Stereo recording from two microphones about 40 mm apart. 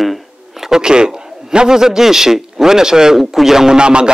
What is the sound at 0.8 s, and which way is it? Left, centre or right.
A man's voice, centre.